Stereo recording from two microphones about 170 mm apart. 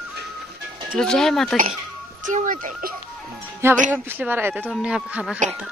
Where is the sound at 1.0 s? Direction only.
5° left (ahead or behind).